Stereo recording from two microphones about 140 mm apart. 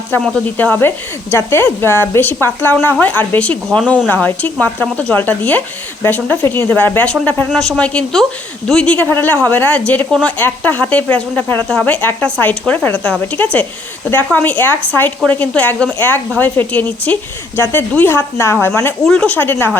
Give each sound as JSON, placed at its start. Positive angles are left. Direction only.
{"t": 0.1, "sound": "a woman's voice", "side_deg": 15}
{"t": 19.0, "sound": "a woman's voice", "side_deg": 5}